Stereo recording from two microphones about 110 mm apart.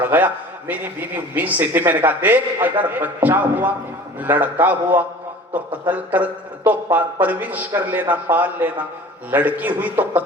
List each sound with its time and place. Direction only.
0.0 s a man's voice: 15° right (ahead or behind)